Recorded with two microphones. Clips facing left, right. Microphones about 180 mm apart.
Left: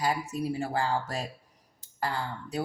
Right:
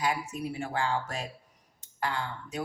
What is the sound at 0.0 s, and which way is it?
Speech, 35° left (ahead or behind).